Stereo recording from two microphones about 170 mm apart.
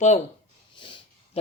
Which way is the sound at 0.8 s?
30° left (ahead or behind).